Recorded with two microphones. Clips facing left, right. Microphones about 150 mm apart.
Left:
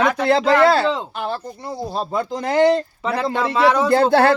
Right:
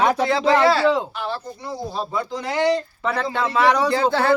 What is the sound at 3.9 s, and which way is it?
Speech, 65° left (ahead or behind).